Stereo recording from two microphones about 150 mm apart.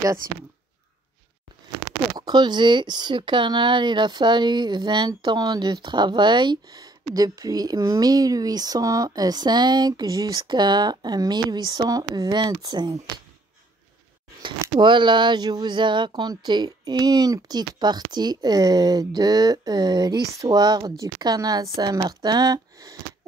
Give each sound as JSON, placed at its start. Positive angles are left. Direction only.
{"t": 2.1, "sound": "speech", "side_deg": -30}
{"t": 14.4, "sound": "speech", "side_deg": -30}